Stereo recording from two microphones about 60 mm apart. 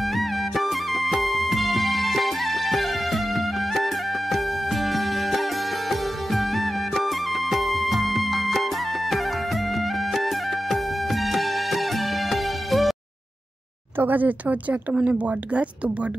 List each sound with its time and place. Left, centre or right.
0.1 s music: centre
9.8 s music: centre
13.9 s speech: right